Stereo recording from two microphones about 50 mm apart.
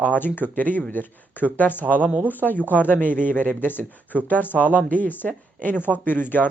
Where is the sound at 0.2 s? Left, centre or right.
Left.